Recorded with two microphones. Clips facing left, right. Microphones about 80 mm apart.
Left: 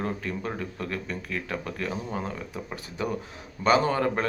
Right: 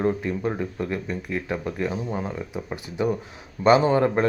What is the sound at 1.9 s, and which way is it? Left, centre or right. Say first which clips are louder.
Speech: right 3 dB; centre.